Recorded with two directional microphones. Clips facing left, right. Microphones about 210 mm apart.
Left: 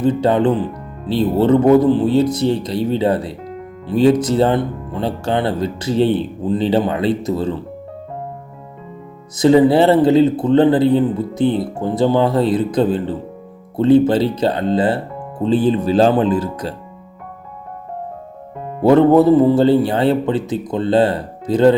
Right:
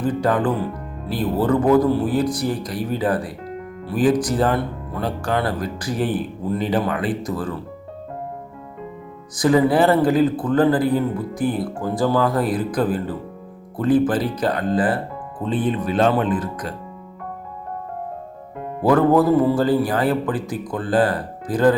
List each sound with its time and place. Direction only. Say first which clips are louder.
0.0 s speech: left 5 dB; 25° left (ahead or behind)
9.3 s speech: left 5 dB; 25° left (ahead or behind)
18.8 s speech: left 5 dB; 25° left (ahead or behind)